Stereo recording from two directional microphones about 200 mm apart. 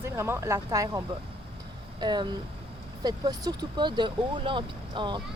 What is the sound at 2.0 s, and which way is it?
Speech, 20° right (ahead or behind).